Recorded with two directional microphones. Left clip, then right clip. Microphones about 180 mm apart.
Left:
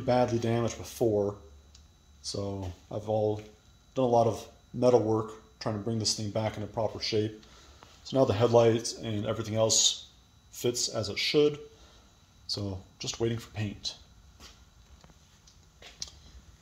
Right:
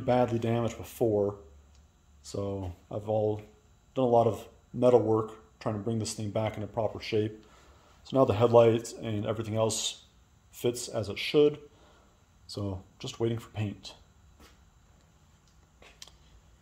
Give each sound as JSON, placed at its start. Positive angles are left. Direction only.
{"t": 0.0, "sound": "speech", "side_deg": -15}
{"t": 2.3, "sound": "speech", "side_deg": -15}